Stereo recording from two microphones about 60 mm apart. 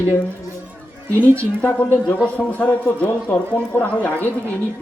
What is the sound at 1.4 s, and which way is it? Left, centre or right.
Speech, left.